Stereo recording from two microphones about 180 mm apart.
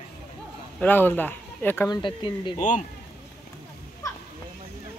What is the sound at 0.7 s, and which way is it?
Speech, 10° left (ahead or behind).